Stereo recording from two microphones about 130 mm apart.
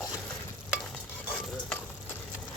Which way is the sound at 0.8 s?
Centre (ahead or behind).